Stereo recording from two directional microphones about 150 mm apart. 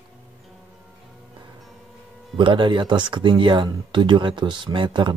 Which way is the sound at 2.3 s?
35° right (ahead or behind).